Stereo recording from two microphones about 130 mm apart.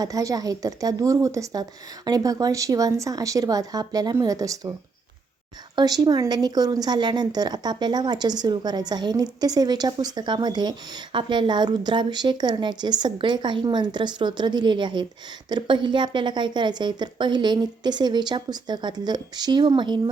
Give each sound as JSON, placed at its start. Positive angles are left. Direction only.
{"t": 0.0, "sound": "speech", "side_deg": -25}
{"t": 5.7, "sound": "a woman's voice", "side_deg": -30}